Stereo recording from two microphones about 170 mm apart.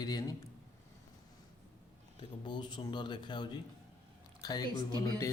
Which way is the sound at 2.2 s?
25° left (ahead or behind).